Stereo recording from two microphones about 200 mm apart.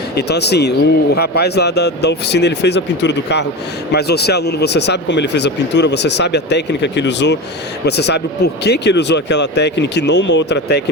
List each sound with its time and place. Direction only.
0.2 s speech: 55° left (ahead or behind)